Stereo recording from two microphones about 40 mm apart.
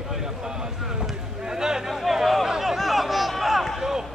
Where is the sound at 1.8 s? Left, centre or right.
Centre.